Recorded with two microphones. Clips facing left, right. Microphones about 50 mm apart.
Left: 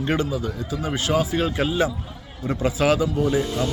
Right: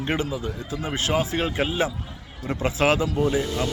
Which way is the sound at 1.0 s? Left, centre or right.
Right.